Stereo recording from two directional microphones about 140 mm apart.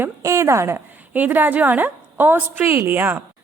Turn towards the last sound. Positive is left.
turn(degrees=-15)  # may be behind; listen again after turning